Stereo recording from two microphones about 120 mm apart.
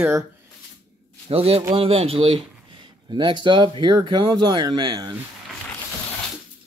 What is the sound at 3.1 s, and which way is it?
Speech, 40° right (ahead or behind).